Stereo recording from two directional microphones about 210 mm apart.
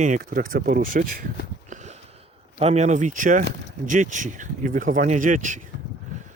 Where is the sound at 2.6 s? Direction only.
30° right (ahead or behind).